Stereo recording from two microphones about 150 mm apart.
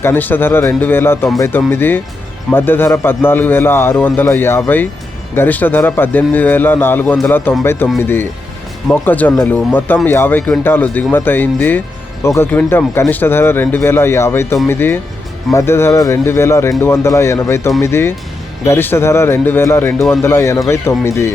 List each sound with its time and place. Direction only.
0.0 s a man's voice: 15° left (ahead or behind)